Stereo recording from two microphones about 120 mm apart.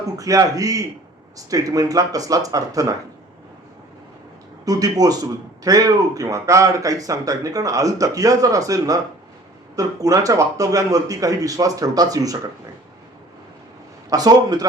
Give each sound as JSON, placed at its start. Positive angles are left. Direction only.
{"t": 0.2, "sound": "speech", "side_deg": -30}
{"t": 4.6, "sound": "speech", "side_deg": -30}
{"t": 14.1, "sound": "a man's voice", "side_deg": -30}